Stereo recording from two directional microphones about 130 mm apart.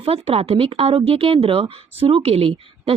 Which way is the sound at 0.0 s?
45° right (ahead or behind).